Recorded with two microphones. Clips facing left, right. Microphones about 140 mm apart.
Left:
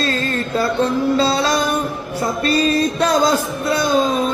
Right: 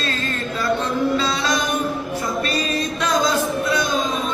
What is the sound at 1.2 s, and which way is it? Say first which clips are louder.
Music: left 5 dB; 35° left (ahead or behind).